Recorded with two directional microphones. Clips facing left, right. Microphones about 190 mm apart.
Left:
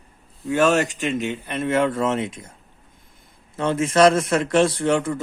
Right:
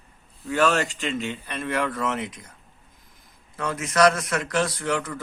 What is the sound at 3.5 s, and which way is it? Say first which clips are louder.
A man's voice: left 6 dB; 25° left (ahead or behind).